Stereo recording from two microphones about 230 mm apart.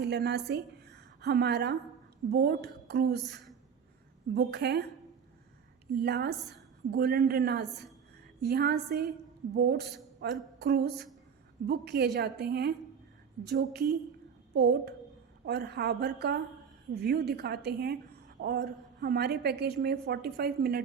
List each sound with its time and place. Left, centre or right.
0.0 s a woman's voice: right
4.4 s a woman's voice: right
5.9 s a woman's voice: right
10.2 s a sound: right
11.6 s a woman's voice: right